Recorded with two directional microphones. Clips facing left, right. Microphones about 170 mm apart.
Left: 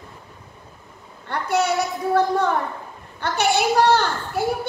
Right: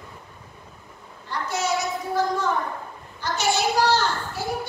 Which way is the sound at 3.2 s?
60° left (ahead or behind).